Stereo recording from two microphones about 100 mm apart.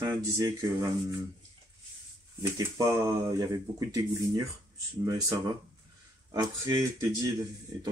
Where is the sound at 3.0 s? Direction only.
35° right (ahead or behind).